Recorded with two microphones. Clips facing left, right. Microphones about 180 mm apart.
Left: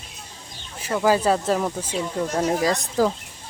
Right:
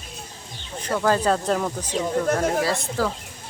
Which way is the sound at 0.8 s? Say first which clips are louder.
Left 1 dB; 10° left (ahead or behind).